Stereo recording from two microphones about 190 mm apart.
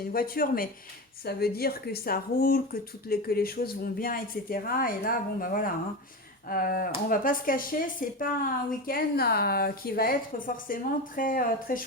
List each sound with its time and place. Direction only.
0.1 s a woman's voice: 50° left (ahead or behind)